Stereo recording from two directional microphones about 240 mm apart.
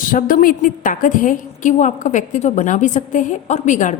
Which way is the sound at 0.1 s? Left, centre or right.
Left.